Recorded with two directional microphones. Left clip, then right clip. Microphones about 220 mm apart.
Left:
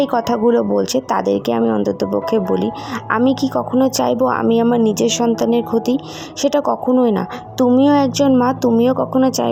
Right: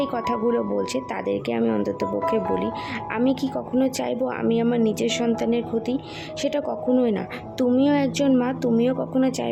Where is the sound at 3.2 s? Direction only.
10° right (ahead or behind).